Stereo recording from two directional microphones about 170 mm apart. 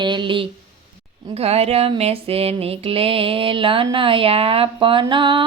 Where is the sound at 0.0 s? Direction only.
25° right (ahead or behind).